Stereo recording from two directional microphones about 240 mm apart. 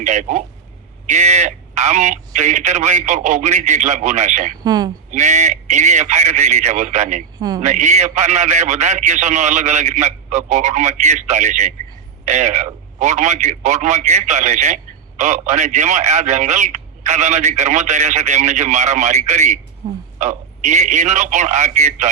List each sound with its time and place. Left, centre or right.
0.0 s a man's voice: right
4.6 s speech: centre
5.1 s a man's voice: right
7.3 s speech: centre
7.6 s a man's voice: right